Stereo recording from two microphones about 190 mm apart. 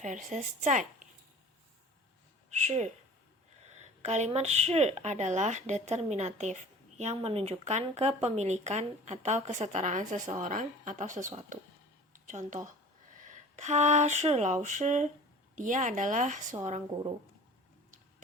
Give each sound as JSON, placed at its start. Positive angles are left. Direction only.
{"t": 0.0, "sound": "a woman's voice", "side_deg": -40}
{"t": 2.6, "sound": "a woman's voice", "side_deg": -40}